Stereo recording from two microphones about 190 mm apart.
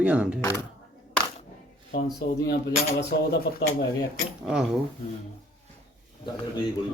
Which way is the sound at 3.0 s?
60° left (ahead or behind).